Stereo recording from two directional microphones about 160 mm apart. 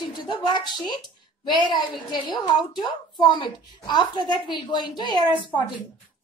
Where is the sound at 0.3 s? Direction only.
30° left (ahead or behind).